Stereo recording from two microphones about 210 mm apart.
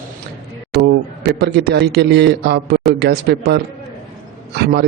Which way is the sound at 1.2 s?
50° right (ahead or behind).